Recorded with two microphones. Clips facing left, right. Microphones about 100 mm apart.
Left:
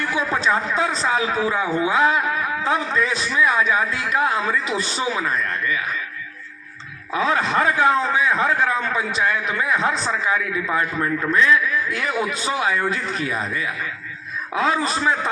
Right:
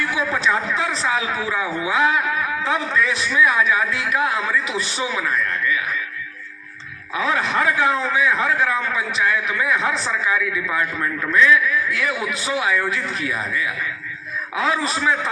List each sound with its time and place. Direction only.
0.0 s a man's voice: 30° left (ahead or behind)
7.1 s a man's voice: 30° left (ahead or behind)